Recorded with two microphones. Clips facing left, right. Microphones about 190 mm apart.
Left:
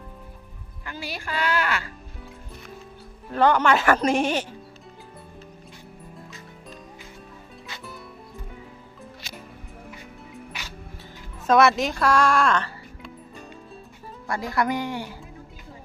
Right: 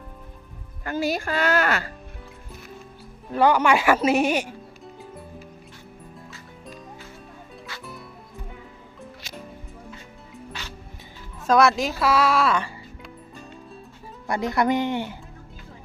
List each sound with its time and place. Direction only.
0.9 s speech: 45° right (ahead or behind)
3.3 s speech: 10° right (ahead or behind)
7.7 s music: 20° left (ahead or behind)
11.4 s speech: centre (ahead or behind)
14.3 s speech: 20° right (ahead or behind)